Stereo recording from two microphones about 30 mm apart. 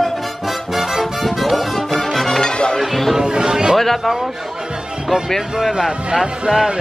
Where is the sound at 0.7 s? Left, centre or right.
Centre.